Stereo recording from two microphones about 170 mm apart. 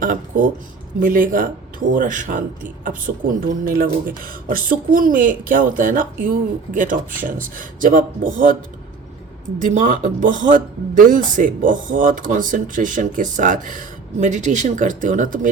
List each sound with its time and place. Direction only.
0.0 s speech: 55° right (ahead or behind)
3.4 s speech: 55° right (ahead or behind)
9.6 s speech: 50° right (ahead or behind)